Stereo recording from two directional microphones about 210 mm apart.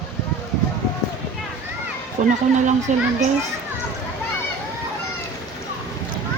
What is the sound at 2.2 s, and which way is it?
Speech, 35° right (ahead or behind).